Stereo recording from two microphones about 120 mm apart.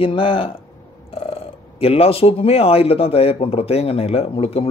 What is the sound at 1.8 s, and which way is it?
A man's voice, 55° left (ahead or behind).